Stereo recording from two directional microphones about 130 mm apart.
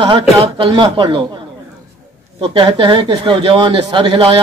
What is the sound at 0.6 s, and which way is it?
Speech, 40° right (ahead or behind).